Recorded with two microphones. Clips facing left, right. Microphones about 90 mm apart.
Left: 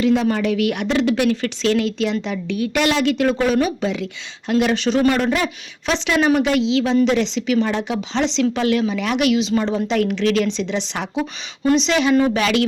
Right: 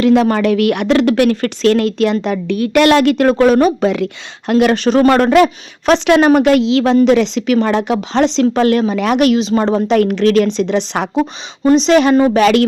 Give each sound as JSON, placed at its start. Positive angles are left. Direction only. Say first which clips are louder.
{"t": 0.0, "sound": "speech", "louder": "right 6 dB", "side_deg": -65}
{"t": 5.3, "sound": "a woman's voice", "louder": "right 11 dB", "side_deg": -60}
{"t": 11.6, "sound": "a woman's voice", "louder": "right 7 dB", "side_deg": -40}